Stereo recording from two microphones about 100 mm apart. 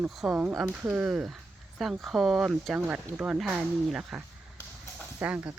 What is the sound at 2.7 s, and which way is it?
Speech, 15° right (ahead or behind).